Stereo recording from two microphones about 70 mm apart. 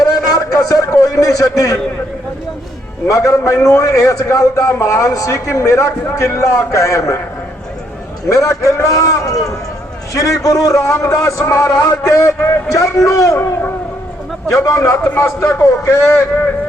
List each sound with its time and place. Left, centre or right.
0.0 s a sound: left
3.1 s a man's voice: left
8.3 s a man's voice: left
11.8 s a man's voice: left
12.5 s a man's voice: left
14.5 s a man's voice: left
15.0 s a man's voice: left